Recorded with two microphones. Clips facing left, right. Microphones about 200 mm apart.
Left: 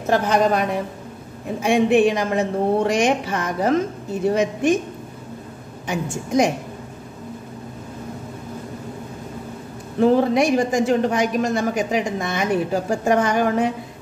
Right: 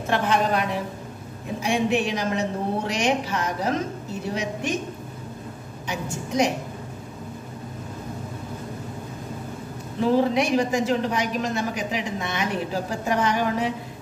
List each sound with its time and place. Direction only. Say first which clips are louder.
0.0 s a woman's voice: left 5 dB; 40° left (ahead or behind)
1.6 s a woman's voice: left 7 dB; 55° left (ahead or behind)
5.9 s a woman's voice: left 5 dB; 50° left (ahead or behind)
9.9 s a woman's voice: left 4 dB; 45° left (ahead or behind)